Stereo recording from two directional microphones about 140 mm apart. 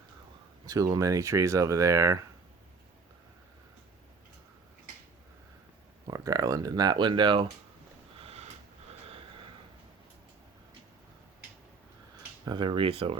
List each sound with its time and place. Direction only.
0.6 s speech: 25° right (ahead or behind)
6.1 s speech: 25° right (ahead or behind)
8.2 s sniff: 50° right (ahead or behind)
8.9 s a sound: 40° right (ahead or behind)
12.5 s speech: 35° right (ahead or behind)